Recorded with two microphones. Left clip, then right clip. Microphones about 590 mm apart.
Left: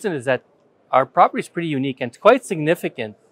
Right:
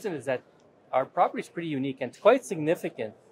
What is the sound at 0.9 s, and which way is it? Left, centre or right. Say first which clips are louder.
Speech: left 10 dB; left.